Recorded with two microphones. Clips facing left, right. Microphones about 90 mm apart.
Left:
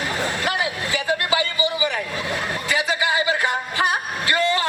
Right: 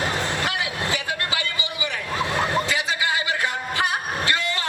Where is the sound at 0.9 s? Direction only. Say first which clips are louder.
Left 6 dB; 25° left (ahead or behind).